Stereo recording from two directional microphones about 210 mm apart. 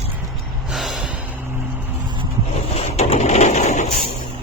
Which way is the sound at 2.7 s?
30° left (ahead or behind).